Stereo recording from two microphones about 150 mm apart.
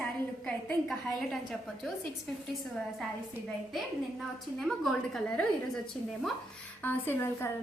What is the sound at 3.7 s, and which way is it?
A woman's voice, centre (ahead or behind).